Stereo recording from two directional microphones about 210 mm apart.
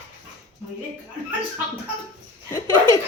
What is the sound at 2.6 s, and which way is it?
Laughter, 20° right (ahead or behind).